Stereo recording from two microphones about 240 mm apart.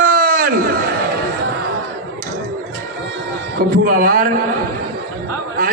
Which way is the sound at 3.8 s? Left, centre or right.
Right.